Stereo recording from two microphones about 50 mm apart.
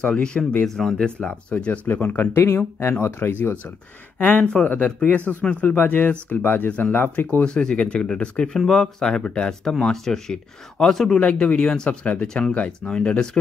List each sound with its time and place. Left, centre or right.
0.0 s speech: centre
0.7 s speech: centre
0.9 s speech: centre
1.5 s speech: left
2.4 s speech: left
3.2 s speech: left
5.8 s speech: left
7.4 s speech: centre
8.5 s speech: centre
9.0 s speech: centre
11.1 s speech: left